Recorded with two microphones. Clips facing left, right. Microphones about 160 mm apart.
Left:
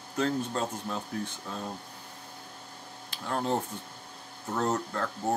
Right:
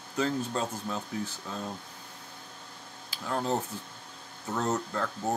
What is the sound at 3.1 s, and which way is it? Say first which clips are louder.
Speech: even; centre (ahead or behind).